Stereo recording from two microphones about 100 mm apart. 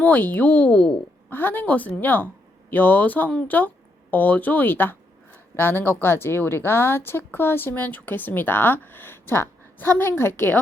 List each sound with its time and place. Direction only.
0.0 s a woman's voice: 15° left (ahead or behind)